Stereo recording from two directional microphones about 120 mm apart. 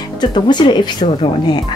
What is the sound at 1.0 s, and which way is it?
Speech, 50° left (ahead or behind).